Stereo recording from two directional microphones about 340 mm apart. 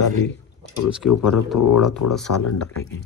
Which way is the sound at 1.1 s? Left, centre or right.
Left.